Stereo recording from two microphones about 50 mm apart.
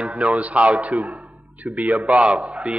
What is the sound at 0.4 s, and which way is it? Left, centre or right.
A man's voice, right.